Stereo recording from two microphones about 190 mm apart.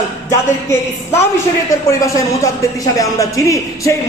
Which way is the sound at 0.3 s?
15° left (ahead or behind).